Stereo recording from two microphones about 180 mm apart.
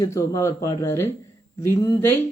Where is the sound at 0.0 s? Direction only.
15° left (ahead or behind).